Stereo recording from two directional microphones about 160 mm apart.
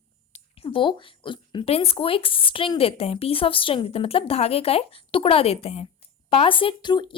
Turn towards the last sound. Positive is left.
turn(degrees=30)  # may be behind; listen again after turning